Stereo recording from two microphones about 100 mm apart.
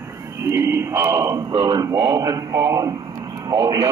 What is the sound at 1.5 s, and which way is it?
Speech, 70° right (ahead or behind).